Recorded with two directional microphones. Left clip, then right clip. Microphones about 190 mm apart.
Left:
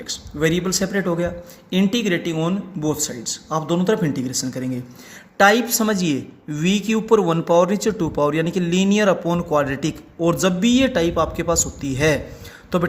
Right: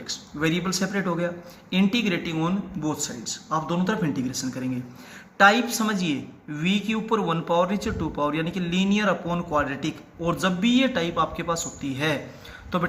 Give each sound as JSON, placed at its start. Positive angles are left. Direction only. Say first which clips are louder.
{"t": 0.0, "sound": "a woman's voice", "louder": "left 5 dB", "side_deg": 45}